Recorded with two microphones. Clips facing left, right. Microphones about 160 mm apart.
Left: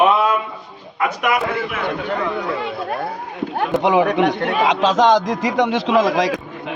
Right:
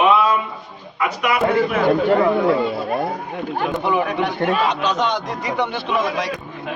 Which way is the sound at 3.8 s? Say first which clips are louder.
Left 7 dB; 90° left.